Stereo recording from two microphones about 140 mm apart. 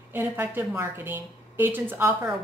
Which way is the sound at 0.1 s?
15° right (ahead or behind).